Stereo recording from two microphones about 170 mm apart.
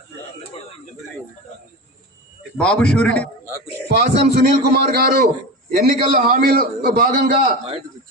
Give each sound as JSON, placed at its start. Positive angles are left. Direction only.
{"t": 2.6, "sound": "a man's voice", "side_deg": 5}
{"t": 3.8, "sound": "a man's voice", "side_deg": -70}